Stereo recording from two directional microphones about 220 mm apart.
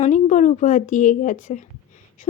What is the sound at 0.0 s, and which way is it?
A woman's voice, 35° left (ahead or behind).